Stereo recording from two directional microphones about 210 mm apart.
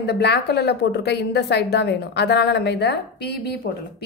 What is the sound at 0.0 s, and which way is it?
A woman's voice, 50° left (ahead or behind).